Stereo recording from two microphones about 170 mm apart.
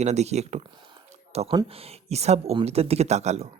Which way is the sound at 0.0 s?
40° right (ahead or behind).